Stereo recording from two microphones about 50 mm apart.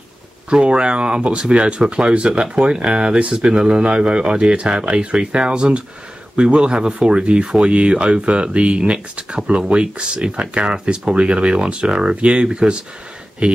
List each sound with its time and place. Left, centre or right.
0.5 s speech: right